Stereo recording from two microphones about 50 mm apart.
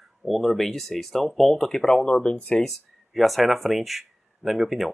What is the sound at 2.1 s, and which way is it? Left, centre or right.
Speech, centre.